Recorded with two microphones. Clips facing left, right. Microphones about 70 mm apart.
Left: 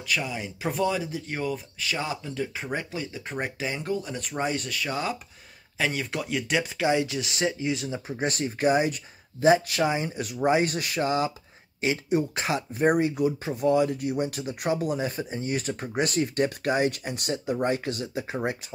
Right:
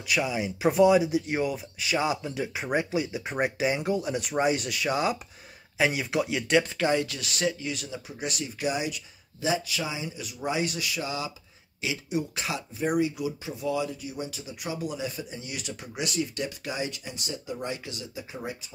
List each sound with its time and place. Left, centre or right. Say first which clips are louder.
0.0 s speech: right 2 dB; centre
7.1 s speech: left 2 dB; left
8.2 s speech: left 6 dB; left